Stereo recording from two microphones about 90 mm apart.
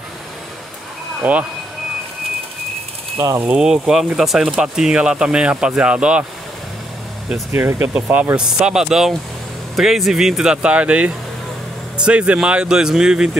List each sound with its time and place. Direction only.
1.2 s speech: 15° right (ahead or behind)
3.2 s speech: 35° right (ahead or behind)
3.4 s speech: 5° right (ahead or behind)
7.5 s speech: 25° right (ahead or behind)
7.9 s speech: 15° right (ahead or behind)